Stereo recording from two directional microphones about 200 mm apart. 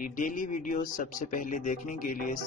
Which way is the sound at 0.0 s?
45° left (ahead or behind).